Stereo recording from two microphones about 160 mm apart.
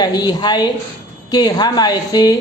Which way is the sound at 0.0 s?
25° left (ahead or behind).